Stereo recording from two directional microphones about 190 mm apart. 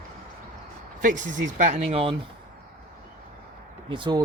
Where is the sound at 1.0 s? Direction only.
45° right (ahead or behind).